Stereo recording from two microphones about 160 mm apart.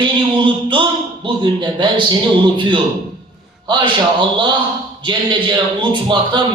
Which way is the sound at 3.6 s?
30° right (ahead or behind).